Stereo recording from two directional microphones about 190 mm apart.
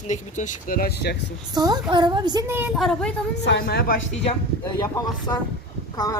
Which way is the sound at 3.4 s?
60° left (ahead or behind).